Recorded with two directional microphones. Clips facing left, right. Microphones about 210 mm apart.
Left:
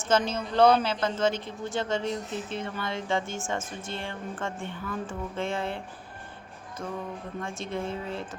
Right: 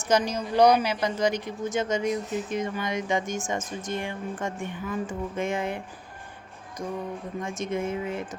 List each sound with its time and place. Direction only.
0.1 s speech: 15° right (ahead or behind)